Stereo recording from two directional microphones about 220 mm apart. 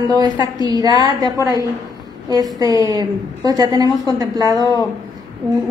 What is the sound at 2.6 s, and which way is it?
A woman's voice, 15° right (ahead or behind).